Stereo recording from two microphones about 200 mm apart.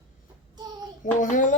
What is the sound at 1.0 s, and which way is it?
Speech, 40° left (ahead or behind).